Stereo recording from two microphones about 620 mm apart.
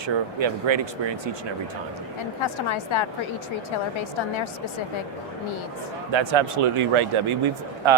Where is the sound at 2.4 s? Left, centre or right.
Left.